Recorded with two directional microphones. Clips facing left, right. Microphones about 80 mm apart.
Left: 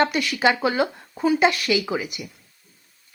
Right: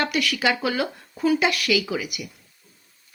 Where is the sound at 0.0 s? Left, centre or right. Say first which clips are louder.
Left 3 dB; left.